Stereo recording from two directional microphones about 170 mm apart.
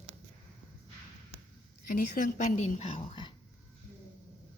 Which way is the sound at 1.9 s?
50° left (ahead or behind).